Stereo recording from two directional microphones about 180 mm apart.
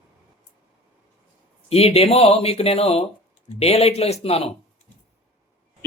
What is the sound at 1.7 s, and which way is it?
Speech, 35° left (ahead or behind).